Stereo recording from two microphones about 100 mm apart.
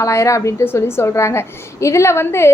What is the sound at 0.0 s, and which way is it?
A woman's voice, 30° left (ahead or behind).